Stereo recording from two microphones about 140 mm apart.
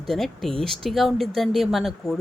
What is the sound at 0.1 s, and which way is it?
Speech, centre (ahead or behind).